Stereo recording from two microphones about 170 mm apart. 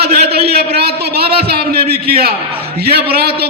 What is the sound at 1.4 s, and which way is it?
A man's voice, 65° right (ahead or behind).